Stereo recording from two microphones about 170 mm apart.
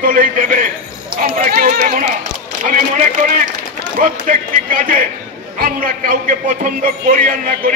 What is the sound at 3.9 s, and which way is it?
A man's voice, 50° right (ahead or behind).